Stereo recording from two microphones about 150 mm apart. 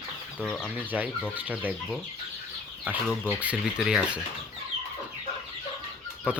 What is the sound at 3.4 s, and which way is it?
Speech, 5° right (ahead or behind).